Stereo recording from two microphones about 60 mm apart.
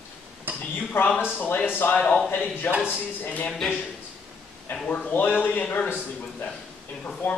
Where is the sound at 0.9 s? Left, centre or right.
Left.